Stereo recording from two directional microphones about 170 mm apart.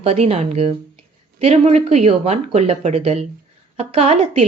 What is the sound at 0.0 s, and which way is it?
A woman's voice, 40° right (ahead or behind).